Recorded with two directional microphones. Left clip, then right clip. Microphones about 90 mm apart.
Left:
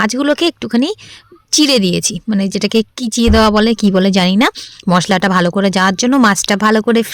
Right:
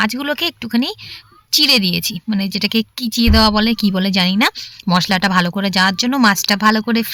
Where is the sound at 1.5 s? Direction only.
90° left.